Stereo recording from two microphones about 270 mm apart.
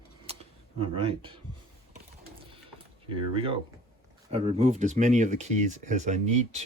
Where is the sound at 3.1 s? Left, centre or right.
Centre.